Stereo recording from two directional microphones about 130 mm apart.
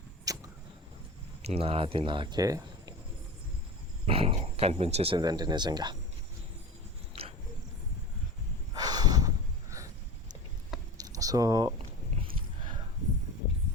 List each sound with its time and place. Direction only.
0.3 s vehicle: 25° right (ahead or behind)
1.5 s speech: 50° right (ahead or behind); by 2.9 s 30° right (ahead or behind)
4.0 s speech: 45° right (ahead or behind)
5.1 s speech: 30° right (ahead or behind)
8.7 s snort: 30° right (ahead or behind)
11.0 s a sound: 25° right (ahead or behind)